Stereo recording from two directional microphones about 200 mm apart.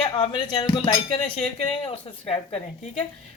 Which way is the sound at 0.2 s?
25° left (ahead or behind).